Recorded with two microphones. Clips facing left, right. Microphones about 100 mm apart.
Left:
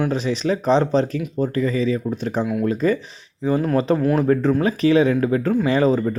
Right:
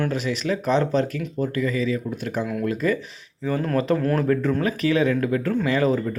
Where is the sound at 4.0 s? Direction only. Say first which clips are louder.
Left 4 dB; 10° left (ahead or behind).